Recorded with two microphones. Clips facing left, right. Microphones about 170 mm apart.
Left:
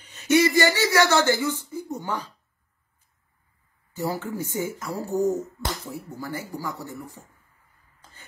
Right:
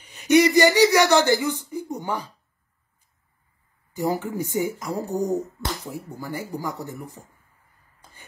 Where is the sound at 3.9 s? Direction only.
15° right (ahead or behind).